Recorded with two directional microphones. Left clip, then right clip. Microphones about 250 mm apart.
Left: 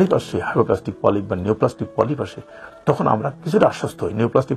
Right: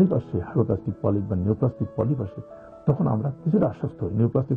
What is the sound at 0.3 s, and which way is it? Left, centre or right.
A man's voice, centre.